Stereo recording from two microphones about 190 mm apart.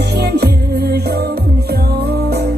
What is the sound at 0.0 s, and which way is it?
Music, 60° right (ahead or behind).